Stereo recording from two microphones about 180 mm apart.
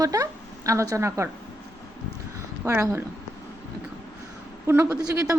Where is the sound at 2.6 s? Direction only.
15° right (ahead or behind).